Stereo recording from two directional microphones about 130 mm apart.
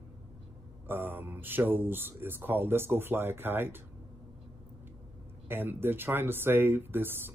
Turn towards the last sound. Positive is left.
turn(degrees=-15)  # may be behind; listen again after turning